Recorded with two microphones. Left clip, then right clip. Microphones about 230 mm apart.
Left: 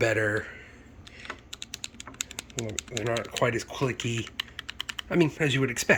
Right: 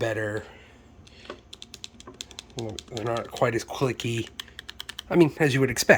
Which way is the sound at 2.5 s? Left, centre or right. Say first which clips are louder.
Even; centre.